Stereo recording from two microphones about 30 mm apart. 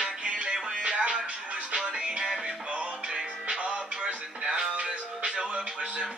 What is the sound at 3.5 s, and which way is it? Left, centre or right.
Music, right.